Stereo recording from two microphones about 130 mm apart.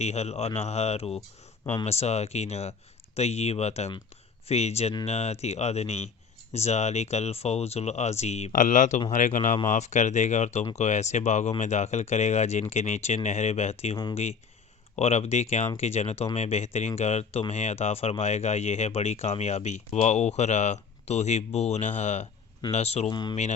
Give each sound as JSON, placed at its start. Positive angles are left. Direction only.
{"t": 0.0, "sound": "speech", "side_deg": 55}
{"t": 9.6, "sound": "speech", "side_deg": 65}
{"t": 13.9, "sound": "speech", "side_deg": 35}
{"t": 14.9, "sound": "speech", "side_deg": 55}
{"t": 23.0, "sound": "speech", "side_deg": 35}